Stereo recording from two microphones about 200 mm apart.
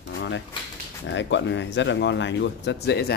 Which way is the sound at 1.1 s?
65° left (ahead or behind).